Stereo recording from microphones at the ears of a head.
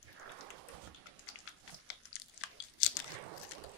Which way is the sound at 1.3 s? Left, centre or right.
Left.